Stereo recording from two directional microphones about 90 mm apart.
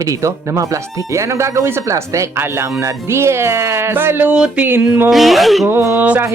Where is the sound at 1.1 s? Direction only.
30° right (ahead or behind).